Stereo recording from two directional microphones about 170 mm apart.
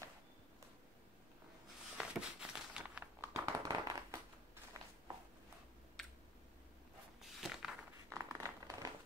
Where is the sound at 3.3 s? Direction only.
20° right (ahead or behind).